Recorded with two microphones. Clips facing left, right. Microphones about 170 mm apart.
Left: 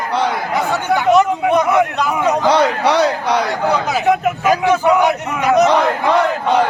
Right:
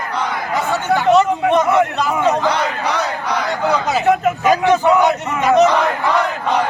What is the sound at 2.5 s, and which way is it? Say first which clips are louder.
Speech: left 6 dB; 75° left (ahead or behind).